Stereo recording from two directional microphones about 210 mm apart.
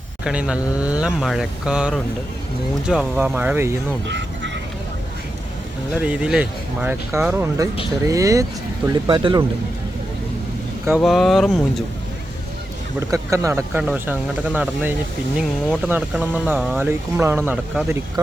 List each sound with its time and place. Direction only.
0.3 s speech: 5° right (ahead or behind)
4.0 s a sound: 55° right (ahead or behind)
5.9 s speech: 5° right (ahead or behind); by 9.4 s 20° right (ahead or behind)
11.0 s speech: centre (ahead or behind)
13.0 s speech: 15° right (ahead or behind)